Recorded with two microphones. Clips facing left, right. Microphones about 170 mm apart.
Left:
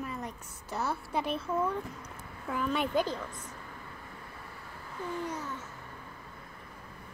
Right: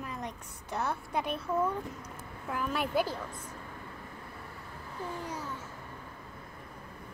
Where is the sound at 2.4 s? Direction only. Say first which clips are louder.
Left 2 dB; 5° right (ahead or behind).